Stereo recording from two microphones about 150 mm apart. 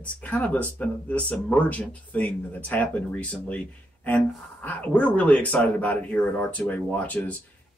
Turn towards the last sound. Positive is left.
turn(degrees=10)  # may be behind; listen again after turning